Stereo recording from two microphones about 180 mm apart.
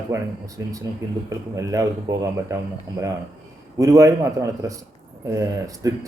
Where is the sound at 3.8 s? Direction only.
20° right (ahead or behind).